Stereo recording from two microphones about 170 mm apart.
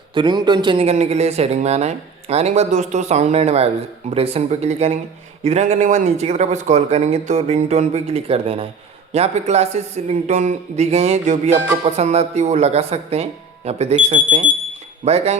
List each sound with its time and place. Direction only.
0.1 s speech: 25° right (ahead or behind)